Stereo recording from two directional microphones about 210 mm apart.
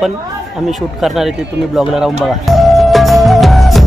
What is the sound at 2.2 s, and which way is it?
Music, centre (ahead or behind).